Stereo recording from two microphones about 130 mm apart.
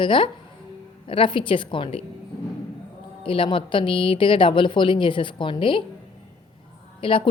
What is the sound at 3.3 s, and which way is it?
A woman's voice, 40° left (ahead or behind).